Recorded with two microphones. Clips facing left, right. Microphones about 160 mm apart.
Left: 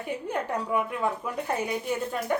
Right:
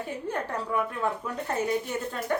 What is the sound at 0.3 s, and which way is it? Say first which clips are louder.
Speech: left 2 dB; 15° left (ahead or behind).